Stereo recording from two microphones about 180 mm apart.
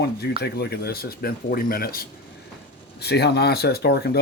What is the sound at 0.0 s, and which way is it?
Speech, 65° left (ahead or behind).